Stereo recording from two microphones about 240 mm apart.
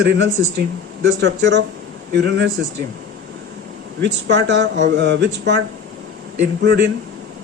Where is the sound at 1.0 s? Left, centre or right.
Right.